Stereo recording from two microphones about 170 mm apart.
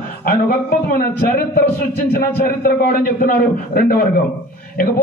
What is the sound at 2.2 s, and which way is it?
A man's voice, 60° left (ahead or behind).